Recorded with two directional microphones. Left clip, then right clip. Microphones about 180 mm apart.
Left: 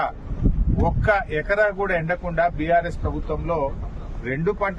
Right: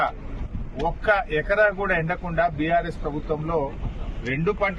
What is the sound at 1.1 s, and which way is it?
A man's voice, 20° left (ahead or behind).